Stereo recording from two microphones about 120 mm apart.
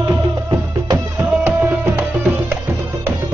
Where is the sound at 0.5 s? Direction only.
25° right (ahead or behind).